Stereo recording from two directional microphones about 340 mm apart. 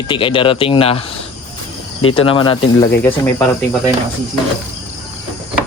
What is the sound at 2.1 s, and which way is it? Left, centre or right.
Speech, centre.